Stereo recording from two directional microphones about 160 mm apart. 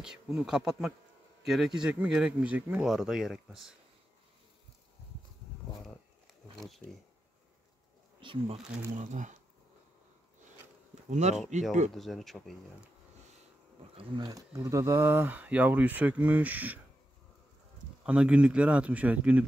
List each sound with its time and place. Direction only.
0.0 s speech: 5° right (ahead or behind)
8.2 s speech: 30° right (ahead or behind)
8.9 s speech: 50° right (ahead or behind)
11.1 s speech: 45° right (ahead or behind)
11.9 s speech: centre (ahead or behind)
13.9 s speech: 25° right (ahead or behind); by 16.8 s 10° right (ahead or behind)
18.0 s speech: 5° right (ahead or behind)